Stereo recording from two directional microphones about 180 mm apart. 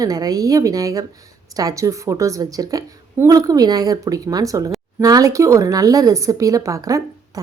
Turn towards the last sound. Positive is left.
turn(degrees=-20)  # may be behind; listen again after turning